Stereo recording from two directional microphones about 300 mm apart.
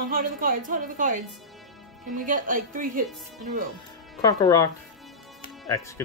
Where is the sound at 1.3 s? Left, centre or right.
Centre.